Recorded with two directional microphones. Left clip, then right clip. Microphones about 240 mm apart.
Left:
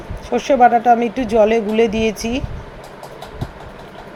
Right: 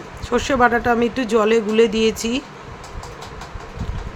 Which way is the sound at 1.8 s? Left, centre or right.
Right.